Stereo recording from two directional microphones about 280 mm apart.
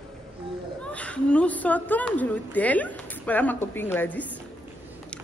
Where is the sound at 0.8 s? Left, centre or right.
Centre.